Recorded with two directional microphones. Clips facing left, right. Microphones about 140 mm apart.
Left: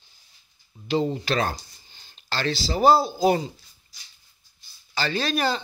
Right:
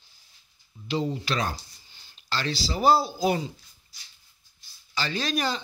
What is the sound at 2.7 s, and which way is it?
Speech, 45° left (ahead or behind).